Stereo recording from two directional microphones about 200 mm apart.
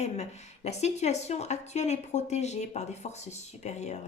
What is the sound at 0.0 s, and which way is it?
A woman's voice, 35° left (ahead or behind).